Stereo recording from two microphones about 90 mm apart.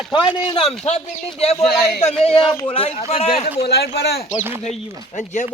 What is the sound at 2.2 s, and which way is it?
Speech, 85° left.